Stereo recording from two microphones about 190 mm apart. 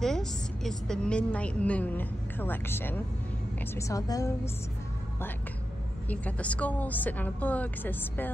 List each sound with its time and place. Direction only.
0.0 s a woman's voice: centre (ahead or behind)
6.0 s a woman's voice: 5° left (ahead or behind)